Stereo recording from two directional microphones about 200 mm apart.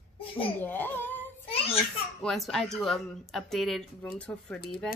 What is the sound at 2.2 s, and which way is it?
Speech, centre (ahead or behind).